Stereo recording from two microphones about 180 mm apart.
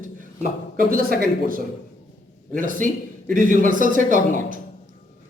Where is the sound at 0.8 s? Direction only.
50° right (ahead or behind).